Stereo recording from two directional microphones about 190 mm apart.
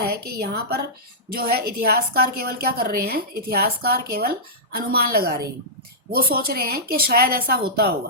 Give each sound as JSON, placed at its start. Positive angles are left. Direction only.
{"t": 0.0, "sound": "a woman's voice", "side_deg": -55}